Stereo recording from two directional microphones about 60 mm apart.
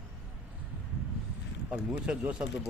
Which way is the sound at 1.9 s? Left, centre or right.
Centre.